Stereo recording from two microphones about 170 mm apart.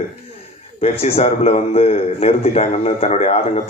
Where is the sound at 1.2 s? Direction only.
40° left (ahead or behind).